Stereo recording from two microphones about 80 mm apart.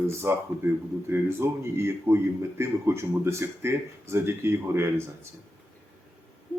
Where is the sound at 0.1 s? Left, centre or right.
Right.